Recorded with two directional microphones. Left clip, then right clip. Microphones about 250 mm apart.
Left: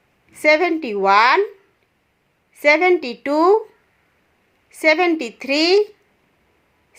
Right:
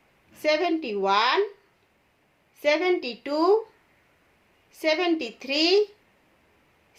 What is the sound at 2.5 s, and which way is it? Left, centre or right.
A woman's voice, left.